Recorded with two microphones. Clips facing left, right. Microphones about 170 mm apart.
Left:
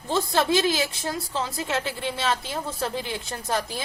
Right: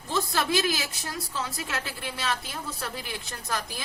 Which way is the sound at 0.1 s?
30° left (ahead or behind).